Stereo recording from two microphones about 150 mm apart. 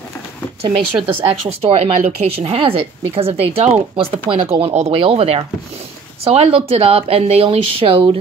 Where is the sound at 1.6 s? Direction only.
45° right (ahead or behind).